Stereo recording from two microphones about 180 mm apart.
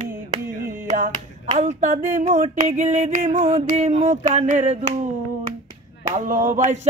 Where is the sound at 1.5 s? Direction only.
40° right (ahead or behind).